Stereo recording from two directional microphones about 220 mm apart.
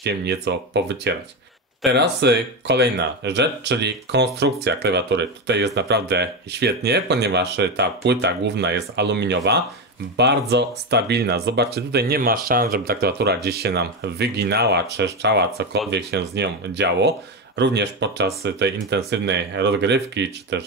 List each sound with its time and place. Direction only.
0.0 s speech: 50° right (ahead or behind)